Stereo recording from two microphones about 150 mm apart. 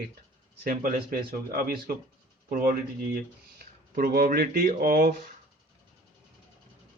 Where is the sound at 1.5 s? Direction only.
80° right.